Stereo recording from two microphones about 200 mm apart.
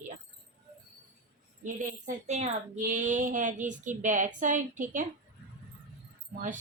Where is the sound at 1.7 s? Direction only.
40° right (ahead or behind).